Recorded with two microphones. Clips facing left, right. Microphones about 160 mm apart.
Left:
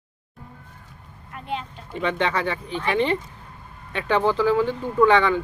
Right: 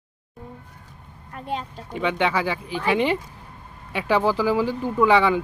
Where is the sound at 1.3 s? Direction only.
40° right (ahead or behind).